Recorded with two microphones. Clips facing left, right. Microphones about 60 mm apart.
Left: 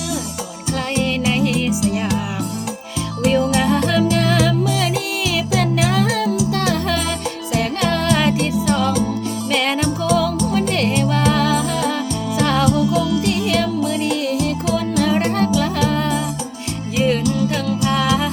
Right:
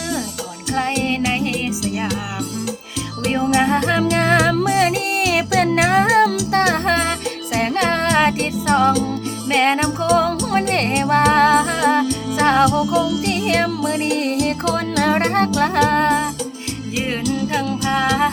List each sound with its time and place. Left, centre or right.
0.8 s music: right
3.3 s music: right
17.0 s music: right